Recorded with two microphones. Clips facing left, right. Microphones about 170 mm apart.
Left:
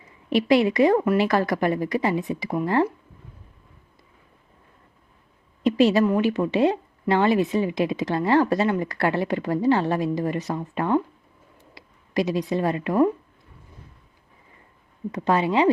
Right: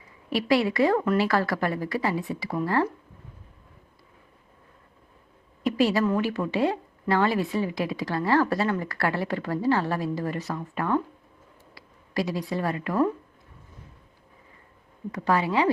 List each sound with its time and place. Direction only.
0.3 s a woman's voice: 20° left (ahead or behind)
5.6 s a woman's voice: 20° left (ahead or behind)
15.1 s a woman's voice: 20° left (ahead or behind)